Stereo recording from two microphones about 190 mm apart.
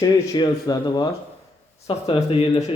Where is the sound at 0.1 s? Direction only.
20° left (ahead or behind).